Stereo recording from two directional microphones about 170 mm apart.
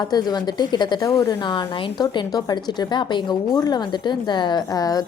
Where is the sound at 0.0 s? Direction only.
25° left (ahead or behind).